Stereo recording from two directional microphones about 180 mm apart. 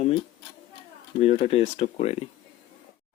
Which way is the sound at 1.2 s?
35° left (ahead or behind).